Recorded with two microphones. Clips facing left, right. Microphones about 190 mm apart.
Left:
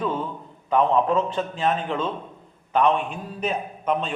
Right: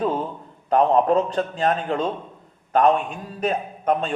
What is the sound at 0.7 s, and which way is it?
A man's voice, 40° right (ahead or behind).